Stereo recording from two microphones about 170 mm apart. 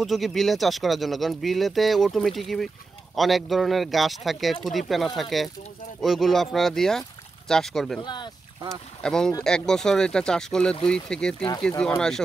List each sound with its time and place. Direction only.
0.0 s speech: centre (ahead or behind)
8.0 s speech: 25° left (ahead or behind)
9.0 s speech: 5° left (ahead or behind)